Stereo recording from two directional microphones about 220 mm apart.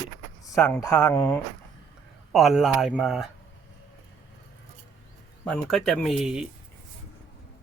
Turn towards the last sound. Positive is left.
turn(degrees=-5)  # may be behind; listen again after turning